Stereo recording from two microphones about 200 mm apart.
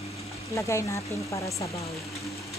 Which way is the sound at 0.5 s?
15° left (ahead or behind).